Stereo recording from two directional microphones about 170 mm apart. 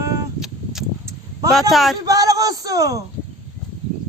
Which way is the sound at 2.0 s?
20° right (ahead or behind).